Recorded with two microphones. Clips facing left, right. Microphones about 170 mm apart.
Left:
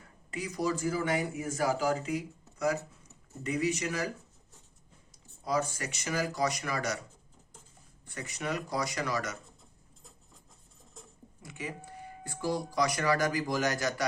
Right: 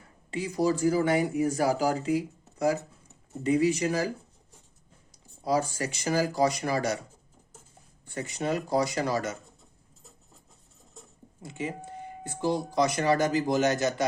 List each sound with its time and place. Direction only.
0.3 s speech: 30° right (ahead or behind)
3.4 s speech: 30° right (ahead or behind)
5.5 s speech: 30° right (ahead or behind)
8.0 s speech: 30° right (ahead or behind)
11.4 s speech: 25° right (ahead or behind)